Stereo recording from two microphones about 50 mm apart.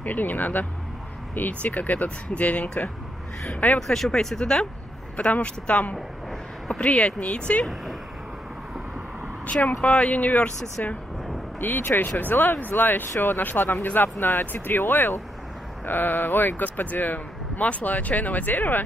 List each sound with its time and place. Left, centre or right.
0.0 s speech: left
3.8 s speech: centre
5.1 s speech: left
9.5 s speech: left